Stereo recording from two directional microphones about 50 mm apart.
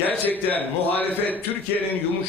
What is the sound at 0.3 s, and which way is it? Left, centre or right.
A man's voice, left.